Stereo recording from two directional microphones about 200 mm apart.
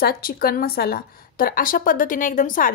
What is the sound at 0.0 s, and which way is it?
A woman's voice, 50° left (ahead or behind).